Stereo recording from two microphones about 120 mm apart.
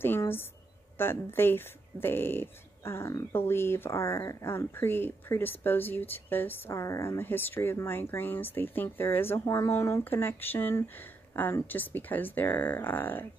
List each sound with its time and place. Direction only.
0.0 s a woman's voice: 20° left (ahead or behind)